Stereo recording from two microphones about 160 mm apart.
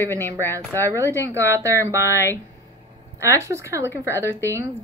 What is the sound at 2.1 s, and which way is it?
Speech, 15° left (ahead or behind).